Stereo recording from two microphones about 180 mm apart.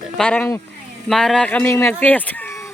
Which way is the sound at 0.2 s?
10° left (ahead or behind).